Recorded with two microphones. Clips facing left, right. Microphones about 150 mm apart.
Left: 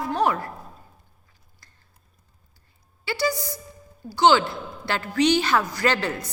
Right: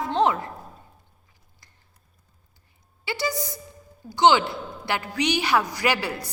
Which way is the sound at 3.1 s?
20° right (ahead or behind).